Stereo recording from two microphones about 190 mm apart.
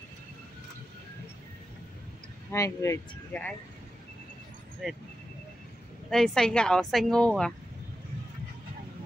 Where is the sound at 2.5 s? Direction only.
15° left (ahead or behind).